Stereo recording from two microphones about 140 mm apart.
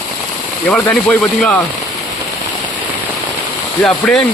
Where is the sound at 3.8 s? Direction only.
5° left (ahead or behind).